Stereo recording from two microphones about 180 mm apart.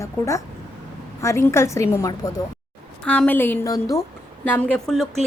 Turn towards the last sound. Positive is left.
turn(degrees=5)  # may be behind; listen again after turning